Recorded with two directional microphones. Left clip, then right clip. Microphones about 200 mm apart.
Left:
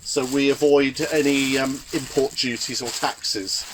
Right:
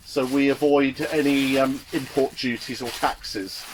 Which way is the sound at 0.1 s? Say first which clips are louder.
Left 1 dB; 50° left (ahead or behind).